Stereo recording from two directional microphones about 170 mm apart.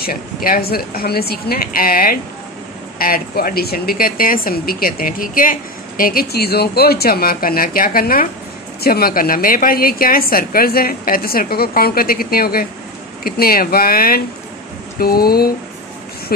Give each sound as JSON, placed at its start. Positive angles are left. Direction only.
{"t": 0.0, "sound": "a woman's voice", "side_deg": 60}